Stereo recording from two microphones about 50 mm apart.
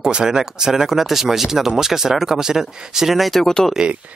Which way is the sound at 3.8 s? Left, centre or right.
Centre.